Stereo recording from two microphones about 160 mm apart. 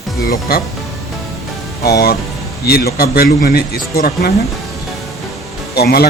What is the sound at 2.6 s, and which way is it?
A man's voice, 75° left (ahead or behind).